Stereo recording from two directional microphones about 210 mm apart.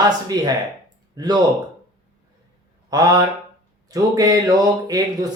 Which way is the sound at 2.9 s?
20° right (ahead or behind).